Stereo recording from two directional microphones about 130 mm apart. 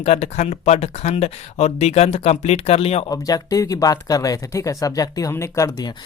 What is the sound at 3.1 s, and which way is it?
Speech, 30° left (ahead or behind).